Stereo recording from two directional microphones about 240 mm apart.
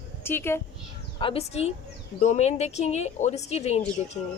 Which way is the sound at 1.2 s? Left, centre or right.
Left.